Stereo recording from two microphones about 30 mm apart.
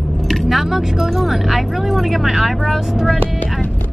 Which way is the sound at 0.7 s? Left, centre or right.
Centre.